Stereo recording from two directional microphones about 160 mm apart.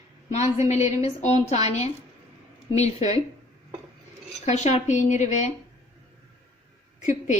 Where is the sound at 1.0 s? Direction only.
40° left (ahead or behind).